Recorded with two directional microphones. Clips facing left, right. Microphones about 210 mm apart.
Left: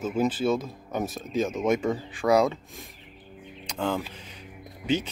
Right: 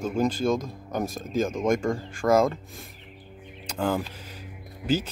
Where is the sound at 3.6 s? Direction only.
5° right (ahead or behind).